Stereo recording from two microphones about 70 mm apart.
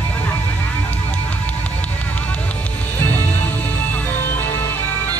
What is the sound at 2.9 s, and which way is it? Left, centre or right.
Music, left.